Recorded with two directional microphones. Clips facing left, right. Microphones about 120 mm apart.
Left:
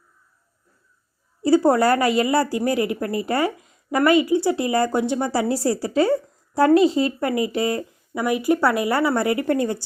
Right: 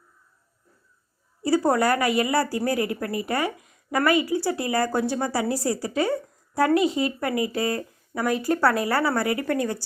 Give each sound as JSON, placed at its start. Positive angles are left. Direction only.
{"t": 1.4, "sound": "a woman's voice", "side_deg": 25}